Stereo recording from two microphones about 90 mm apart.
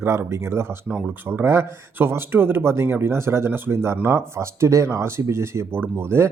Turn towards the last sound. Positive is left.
turn(degrees=-25)  # may be behind; listen again after turning